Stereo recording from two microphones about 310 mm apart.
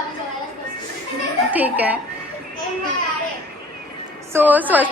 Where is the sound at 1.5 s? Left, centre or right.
Centre.